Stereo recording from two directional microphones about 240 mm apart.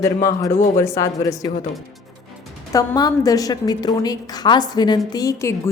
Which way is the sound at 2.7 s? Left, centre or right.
Centre.